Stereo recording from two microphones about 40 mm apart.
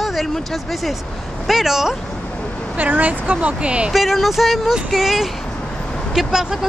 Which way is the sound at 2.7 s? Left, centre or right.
Right.